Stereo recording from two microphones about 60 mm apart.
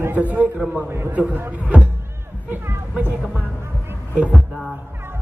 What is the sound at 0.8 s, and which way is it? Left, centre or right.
Speech, right.